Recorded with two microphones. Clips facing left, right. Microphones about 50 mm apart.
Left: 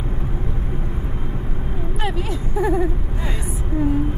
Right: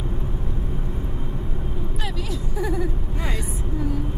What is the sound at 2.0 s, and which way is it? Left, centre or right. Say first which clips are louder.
Speech: left 5 dB; left.